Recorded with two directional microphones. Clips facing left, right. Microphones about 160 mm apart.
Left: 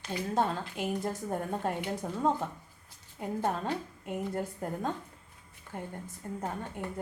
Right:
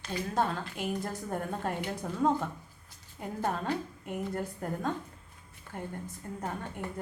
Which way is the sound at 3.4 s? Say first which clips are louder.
Right 2 dB; 20° left (ahead or behind).